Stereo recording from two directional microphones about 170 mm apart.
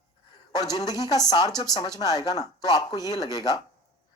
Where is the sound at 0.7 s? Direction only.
25° left (ahead or behind).